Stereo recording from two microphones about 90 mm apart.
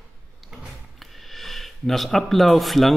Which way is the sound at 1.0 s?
Centre (ahead or behind).